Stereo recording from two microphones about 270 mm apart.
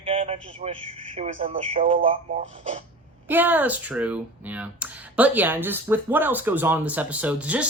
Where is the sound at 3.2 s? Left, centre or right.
Centre.